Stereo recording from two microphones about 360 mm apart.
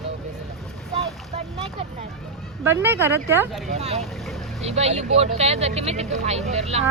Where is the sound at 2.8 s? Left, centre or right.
Centre.